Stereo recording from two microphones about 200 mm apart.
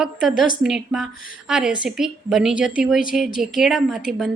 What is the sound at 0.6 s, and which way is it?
A woman's voice, centre (ahead or behind).